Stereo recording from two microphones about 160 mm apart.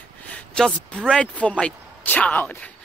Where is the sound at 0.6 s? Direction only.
5° left (ahead or behind).